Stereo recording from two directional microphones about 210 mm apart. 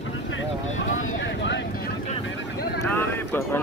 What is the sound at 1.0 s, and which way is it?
Vehicle, 60° left (ahead or behind).